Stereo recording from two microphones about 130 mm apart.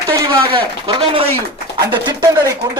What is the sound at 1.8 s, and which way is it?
Speech, 35° right (ahead or behind).